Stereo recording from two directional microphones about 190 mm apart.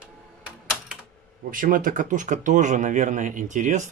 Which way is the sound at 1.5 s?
45° right (ahead or behind).